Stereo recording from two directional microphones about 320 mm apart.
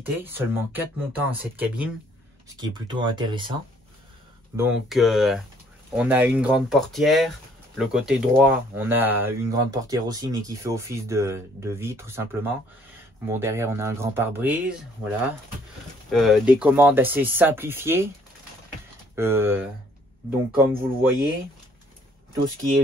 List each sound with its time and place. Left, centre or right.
0.1 s speech: centre
4.6 s speech: centre
19.1 s speech: centre